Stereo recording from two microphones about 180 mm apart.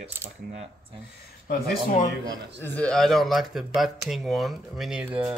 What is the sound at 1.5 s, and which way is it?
Speech, 55° left (ahead or behind).